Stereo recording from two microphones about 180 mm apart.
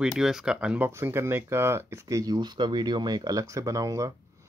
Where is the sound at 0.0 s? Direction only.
5° right (ahead or behind).